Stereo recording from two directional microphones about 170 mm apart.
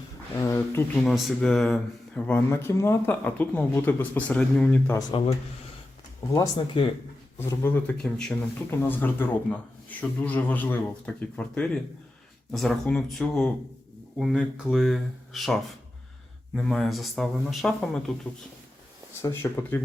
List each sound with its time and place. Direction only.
0.3 s speech: 15° left (ahead or behind)
1.0 s speech: centre (ahead or behind)
5.1 s speech: 30° left (ahead or behind)
6.3 s speech: 20° left (ahead or behind); by 18.0 s centre (ahead or behind)
19.2 s speech: 15° left (ahead or behind)